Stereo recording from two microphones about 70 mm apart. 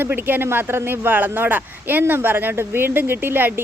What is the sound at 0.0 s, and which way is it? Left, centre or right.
Speech, right.